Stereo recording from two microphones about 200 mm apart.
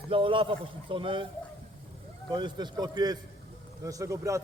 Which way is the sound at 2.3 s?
20° right (ahead or behind).